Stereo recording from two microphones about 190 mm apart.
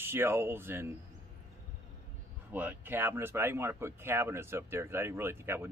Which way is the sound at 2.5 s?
10° right (ahead or behind).